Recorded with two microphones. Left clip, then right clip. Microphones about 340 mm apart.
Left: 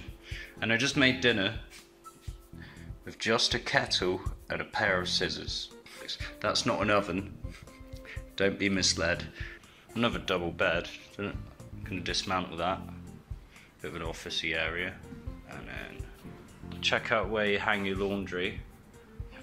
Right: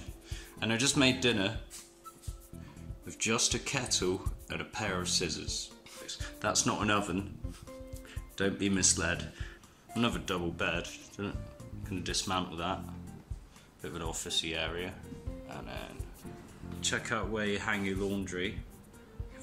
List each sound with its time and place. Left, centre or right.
0.3 s speech: centre
3.1 s speech: centre
8.4 s speech: centre
13.7 s speech: centre
16.8 s speech: centre